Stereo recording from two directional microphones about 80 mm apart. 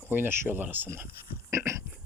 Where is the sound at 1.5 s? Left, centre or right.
Right.